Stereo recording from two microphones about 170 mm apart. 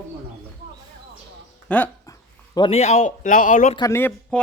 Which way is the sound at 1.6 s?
10° left (ahead or behind).